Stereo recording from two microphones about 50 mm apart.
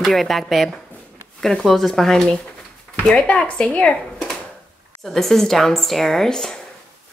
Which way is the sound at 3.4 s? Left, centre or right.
Left.